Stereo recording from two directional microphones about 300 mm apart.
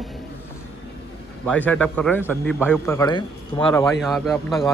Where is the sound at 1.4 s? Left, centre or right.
Centre.